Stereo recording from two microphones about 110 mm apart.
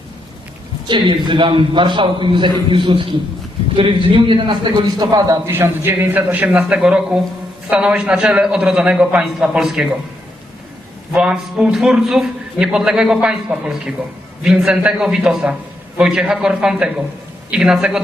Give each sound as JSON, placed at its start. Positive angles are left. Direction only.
{"t": 0.9, "sound": "a man's voice", "side_deg": -45}
{"t": 5.5, "sound": "a man's voice", "side_deg": -20}
{"t": 11.1, "sound": "a man's voice", "side_deg": -10}